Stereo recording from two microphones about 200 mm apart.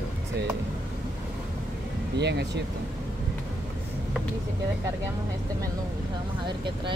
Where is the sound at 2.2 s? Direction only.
60° right (ahead or behind).